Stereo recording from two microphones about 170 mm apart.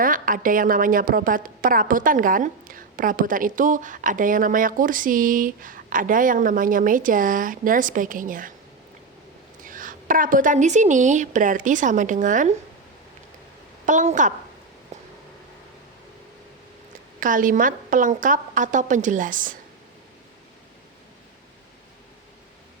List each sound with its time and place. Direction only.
0.0 s a woman's voice: 55° right (ahead or behind)
9.6 s a woman's voice: 50° right (ahead or behind)
13.8 s a woman's voice: 45° right (ahead or behind)
17.2 s a woman's voice: 50° right (ahead or behind)